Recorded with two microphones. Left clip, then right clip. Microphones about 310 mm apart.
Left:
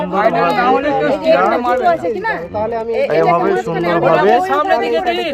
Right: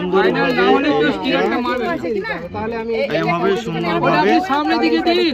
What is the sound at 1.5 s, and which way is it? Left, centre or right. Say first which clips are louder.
Speech: left 6 dB; centre.